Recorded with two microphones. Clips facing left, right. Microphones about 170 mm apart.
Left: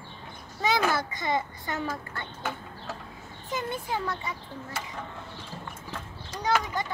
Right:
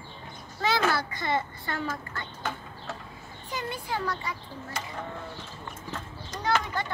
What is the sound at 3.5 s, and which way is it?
Speech, 20° left (ahead or behind).